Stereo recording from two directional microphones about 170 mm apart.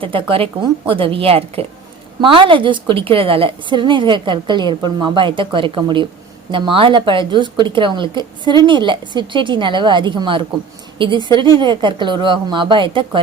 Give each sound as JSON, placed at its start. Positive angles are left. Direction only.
{"t": 0.0, "sound": "a woman's voice", "side_deg": -30}